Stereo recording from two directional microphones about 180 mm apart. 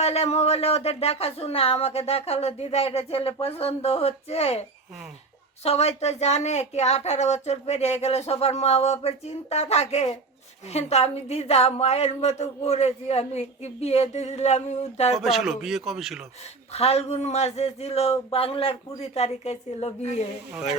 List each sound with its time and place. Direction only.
0.0 s a woman's voice: 35° left (ahead or behind)
5.6 s a woman's voice: 35° left (ahead or behind)
15.1 s speech: centre (ahead or behind)
16.7 s a woman's voice: 35° left (ahead or behind)